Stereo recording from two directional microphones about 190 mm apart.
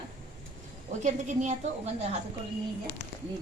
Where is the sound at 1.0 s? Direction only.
40° right (ahead or behind).